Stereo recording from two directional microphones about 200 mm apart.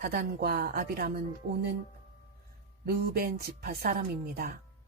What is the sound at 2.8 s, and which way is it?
A woman's voice, 50° right (ahead or behind).